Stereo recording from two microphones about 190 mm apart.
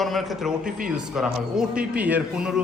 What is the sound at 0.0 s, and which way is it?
A man's voice, centre (ahead or behind).